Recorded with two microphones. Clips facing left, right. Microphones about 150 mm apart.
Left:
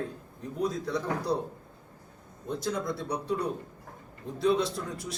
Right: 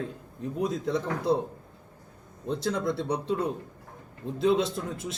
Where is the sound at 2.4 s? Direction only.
25° right (ahead or behind).